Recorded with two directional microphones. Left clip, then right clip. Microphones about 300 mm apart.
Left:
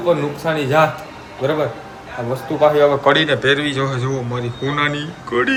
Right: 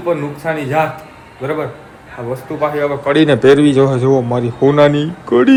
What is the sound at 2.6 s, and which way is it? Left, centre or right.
Speech, centre.